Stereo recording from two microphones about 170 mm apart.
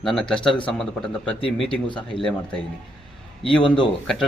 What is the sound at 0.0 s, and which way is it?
Speech, 5° left (ahead or behind).